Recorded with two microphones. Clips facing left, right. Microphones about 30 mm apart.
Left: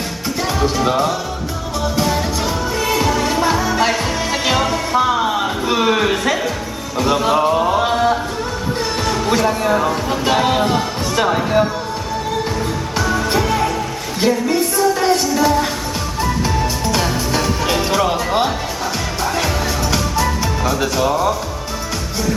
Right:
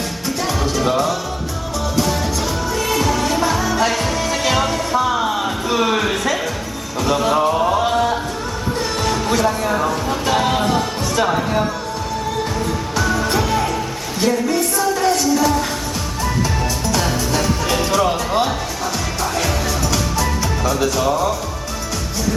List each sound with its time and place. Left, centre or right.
0.6 s speech: centre
2.7 s music: left
3.1 s music: centre
5.6 s a sound: centre
7.0 s speech: centre
7.8 s chant: centre
9.0 s a sound: centre
9.3 s speech: centre
10.3 s music: centre
13.0 s music: centre
14.2 s music: left
17.0 s music: centre
19.9 s music: centre